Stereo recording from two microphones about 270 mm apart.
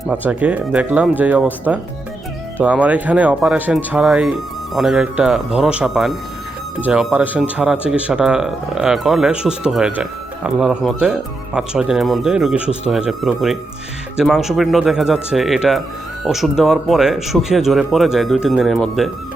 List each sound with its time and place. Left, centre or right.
0.1 s speech: centre